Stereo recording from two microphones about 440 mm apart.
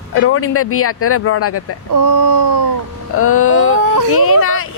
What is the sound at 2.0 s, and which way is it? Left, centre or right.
Speech, right.